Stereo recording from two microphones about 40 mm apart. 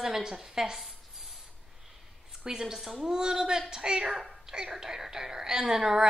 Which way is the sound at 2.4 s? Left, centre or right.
Centre.